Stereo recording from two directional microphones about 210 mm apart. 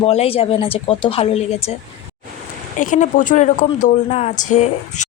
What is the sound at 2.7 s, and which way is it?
Speech, 35° left (ahead or behind).